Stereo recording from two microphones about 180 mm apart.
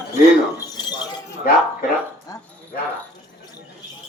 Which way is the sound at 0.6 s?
20° left (ahead or behind).